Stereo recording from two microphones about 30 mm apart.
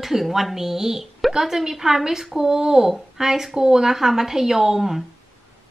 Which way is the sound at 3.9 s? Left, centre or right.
Centre.